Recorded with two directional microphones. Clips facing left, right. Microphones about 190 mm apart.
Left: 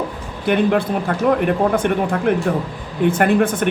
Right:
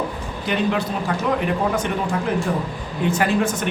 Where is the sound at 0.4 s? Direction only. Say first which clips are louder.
Left 6 dB; 55° left (ahead or behind).